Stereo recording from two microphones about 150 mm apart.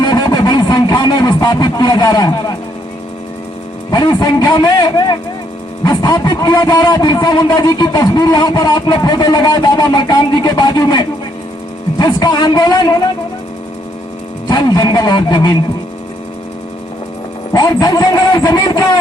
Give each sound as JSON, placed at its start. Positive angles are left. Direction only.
{"t": 0.0, "sound": "a sound", "side_deg": 30}
{"t": 3.9, "sound": "speech", "side_deg": 25}
{"t": 14.4, "sound": "speech", "side_deg": 30}
{"t": 17.5, "sound": "speech", "side_deg": 25}